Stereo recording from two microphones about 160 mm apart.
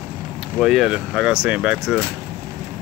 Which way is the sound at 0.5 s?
Centre (ahead or behind).